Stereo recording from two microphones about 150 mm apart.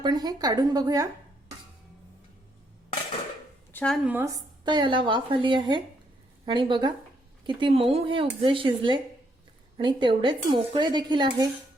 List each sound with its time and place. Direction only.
0.0 s a woman's voice: 30° right (ahead or behind)
3.7 s a sound: 10° left (ahead or behind)
3.9 s speech: 10° right (ahead or behind)
4.3 s speech: 25° right (ahead or behind)